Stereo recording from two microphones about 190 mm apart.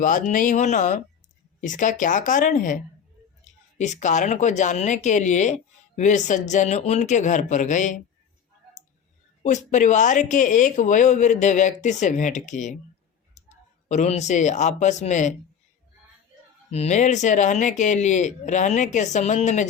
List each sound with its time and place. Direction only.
0.0 s speech: 45° left (ahead or behind)
9.4 s speech: 40° left (ahead or behind)
13.8 s speech: 35° left (ahead or behind)
16.7 s speech: 35° left (ahead or behind)